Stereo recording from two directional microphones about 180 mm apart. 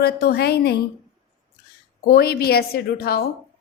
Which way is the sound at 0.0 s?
60° left (ahead or behind).